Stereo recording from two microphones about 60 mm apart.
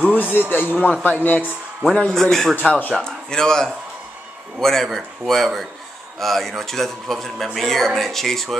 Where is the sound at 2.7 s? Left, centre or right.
Left.